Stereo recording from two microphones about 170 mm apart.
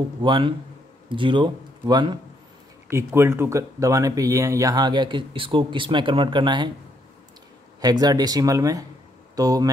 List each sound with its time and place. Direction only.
0.2 s speech: 30° right (ahead or behind)
7.8 s speech: 25° right (ahead or behind)